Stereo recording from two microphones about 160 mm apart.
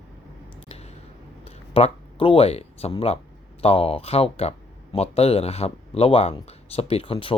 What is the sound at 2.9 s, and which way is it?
Speech, 40° left (ahead or behind).